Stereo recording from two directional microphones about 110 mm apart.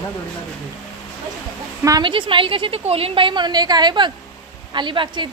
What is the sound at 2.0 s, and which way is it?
A woman's voice, 50° right (ahead or behind).